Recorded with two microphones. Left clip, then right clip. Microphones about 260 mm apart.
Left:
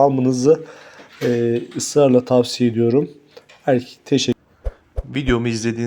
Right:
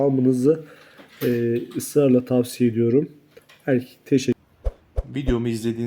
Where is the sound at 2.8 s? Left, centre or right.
Left.